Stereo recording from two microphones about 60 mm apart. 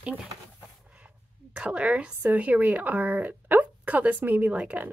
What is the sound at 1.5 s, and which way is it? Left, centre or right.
A woman's voice, centre.